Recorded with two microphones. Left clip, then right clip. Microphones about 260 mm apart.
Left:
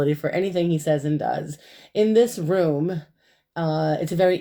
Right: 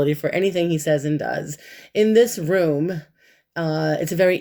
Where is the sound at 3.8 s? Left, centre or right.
Right.